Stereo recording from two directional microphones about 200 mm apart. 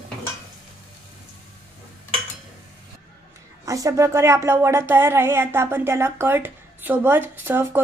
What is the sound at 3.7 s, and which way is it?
Speech, 15° right (ahead or behind).